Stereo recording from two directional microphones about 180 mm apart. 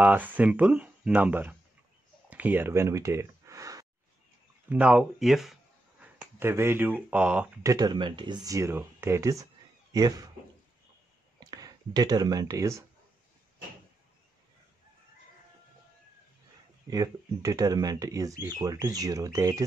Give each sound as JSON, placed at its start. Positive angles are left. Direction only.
{"t": 0.0, "sound": "speech", "side_deg": -10}
{"t": 2.2, "sound": "gasp", "side_deg": -10}
{"t": 4.6, "sound": "speech", "side_deg": -5}
{"t": 7.6, "sound": "speech", "side_deg": -20}
{"t": 11.3, "sound": "speech", "side_deg": -20}
{"t": 16.9, "sound": "speech", "side_deg": -20}